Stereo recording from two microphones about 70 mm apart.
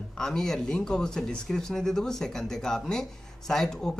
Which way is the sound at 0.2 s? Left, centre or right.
Centre.